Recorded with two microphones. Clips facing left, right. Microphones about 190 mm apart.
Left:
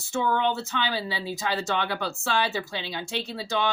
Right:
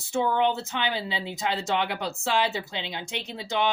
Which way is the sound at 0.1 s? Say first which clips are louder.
Right 1 dB; 15° right (ahead or behind).